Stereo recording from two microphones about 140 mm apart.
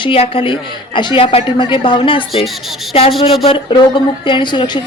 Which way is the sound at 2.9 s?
45° left (ahead or behind).